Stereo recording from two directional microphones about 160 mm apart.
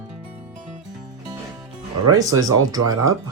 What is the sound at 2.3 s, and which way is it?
Speech, 25° right (ahead or behind).